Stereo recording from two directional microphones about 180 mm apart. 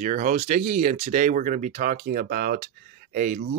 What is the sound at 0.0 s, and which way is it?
Speech, 45° right (ahead or behind).